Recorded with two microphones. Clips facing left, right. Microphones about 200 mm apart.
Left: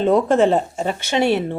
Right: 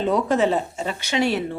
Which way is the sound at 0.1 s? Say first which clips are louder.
Left 5 dB; 50° left (ahead or behind).